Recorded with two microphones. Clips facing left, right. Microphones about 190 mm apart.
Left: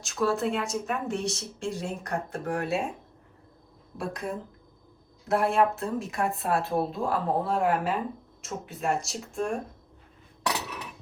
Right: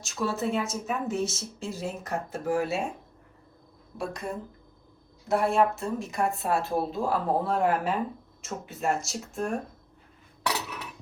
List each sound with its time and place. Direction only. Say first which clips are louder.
0.0 s speech: left 3 dB; centre (ahead or behind)
3.9 s speech: even; centre (ahead or behind)